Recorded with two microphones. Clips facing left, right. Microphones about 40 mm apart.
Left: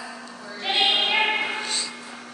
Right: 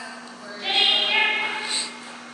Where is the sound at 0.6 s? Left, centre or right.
Centre.